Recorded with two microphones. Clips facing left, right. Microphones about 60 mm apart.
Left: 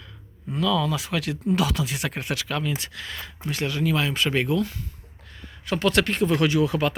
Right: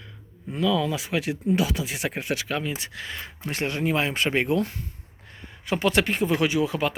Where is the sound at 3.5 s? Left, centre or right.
Right.